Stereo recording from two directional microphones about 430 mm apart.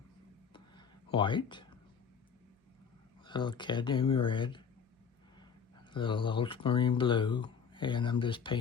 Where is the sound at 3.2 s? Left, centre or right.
Centre.